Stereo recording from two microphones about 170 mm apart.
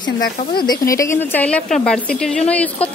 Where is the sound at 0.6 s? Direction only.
20° left (ahead or behind).